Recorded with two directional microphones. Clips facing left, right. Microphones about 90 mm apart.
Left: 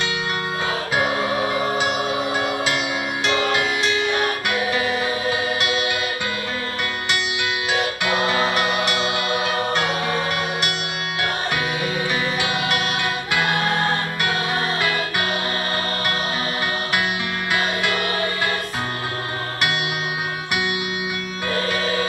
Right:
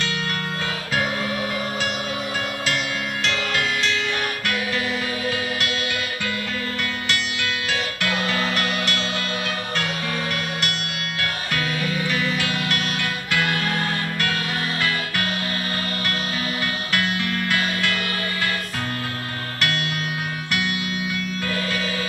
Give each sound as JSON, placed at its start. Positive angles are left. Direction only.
{"t": 0.9, "sound": "music", "side_deg": 20}
{"t": 7.1, "sound": "music", "side_deg": 15}
{"t": 12.4, "sound": "music", "side_deg": 20}
{"t": 17.5, "sound": "music", "side_deg": 20}
{"t": 21.5, "sound": "music", "side_deg": 30}